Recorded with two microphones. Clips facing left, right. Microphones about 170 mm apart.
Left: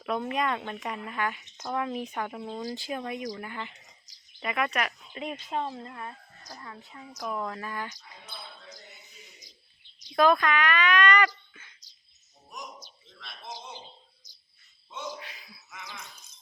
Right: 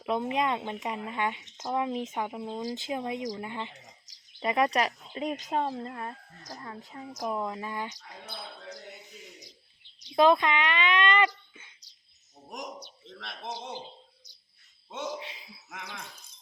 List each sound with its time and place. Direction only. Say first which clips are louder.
0.0 s speech: right 1 dB; 20° right (ahead or behind); by 7.1 s 35° right (ahead or behind)
7.3 s speech: right 1 dB; 20° right (ahead or behind)
8.4 s a sound: right 5 dB; 75° right (ahead or behind)
10.1 s speech: right 1 dB; 25° right (ahead or behind)
12.5 s a sound: right 4 dB; 75° right (ahead or behind)
14.2 s cricket: right 3 dB; 65° right (ahead or behind)
14.8 s a man's voice: right 3 dB; 70° right (ahead or behind)
15.2 s a sound: right 3 dB; 25° right (ahead or behind)
15.7 s speech: right 2 dB; 65° right (ahead or behind)